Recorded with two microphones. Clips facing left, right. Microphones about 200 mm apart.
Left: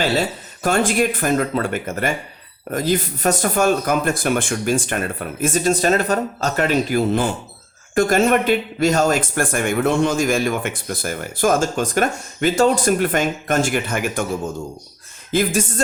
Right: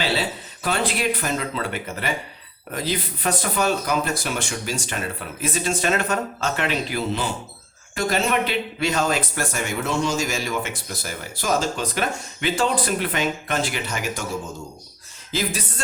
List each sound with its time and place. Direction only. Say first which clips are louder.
0.0 s speech: left 5 dB; 45° left (ahead or behind)
15.3 s speech: left 8 dB; 55° left (ahead or behind)